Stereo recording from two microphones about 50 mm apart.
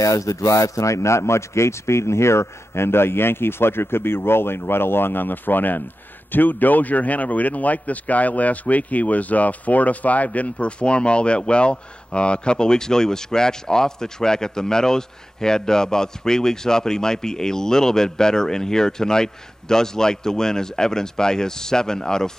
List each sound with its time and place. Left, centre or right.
0.1 s a man's voice: left; by 22.3 s centre